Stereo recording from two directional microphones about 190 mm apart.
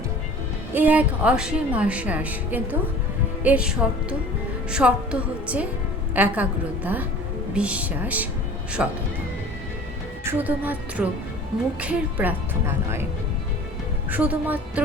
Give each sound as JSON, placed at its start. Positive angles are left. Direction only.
{"t": 0.7, "sound": "a woman's voice", "side_deg": -10}
{"t": 10.2, "sound": "a woman's voice", "side_deg": -10}
{"t": 14.1, "sound": "a woman's voice", "side_deg": -10}